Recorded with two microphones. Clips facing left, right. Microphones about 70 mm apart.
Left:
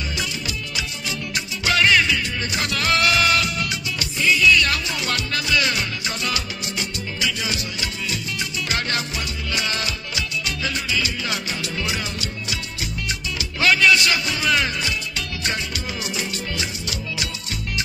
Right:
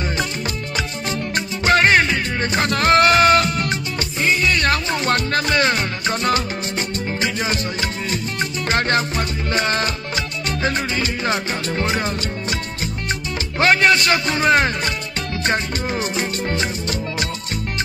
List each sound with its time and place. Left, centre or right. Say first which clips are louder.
1.3 s music: right 6 dB; right
13.6 s speech: right 2 dB; right
15.4 s music: right 7 dB; right